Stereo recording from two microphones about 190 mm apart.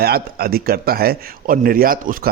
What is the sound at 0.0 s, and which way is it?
Speech, 55° right (ahead or behind).